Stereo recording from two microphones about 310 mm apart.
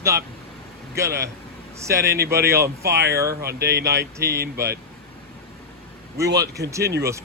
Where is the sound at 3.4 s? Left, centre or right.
Right.